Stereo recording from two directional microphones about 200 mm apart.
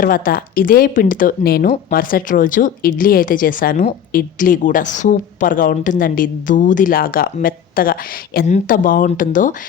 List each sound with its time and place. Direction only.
0.0 s speech: 45° left (ahead or behind)